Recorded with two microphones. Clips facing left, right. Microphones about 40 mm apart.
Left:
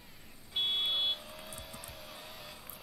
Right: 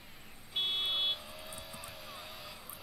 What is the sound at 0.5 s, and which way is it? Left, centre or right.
Vehicle, right.